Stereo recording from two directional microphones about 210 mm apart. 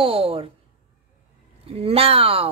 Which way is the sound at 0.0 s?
25° right (ahead or behind).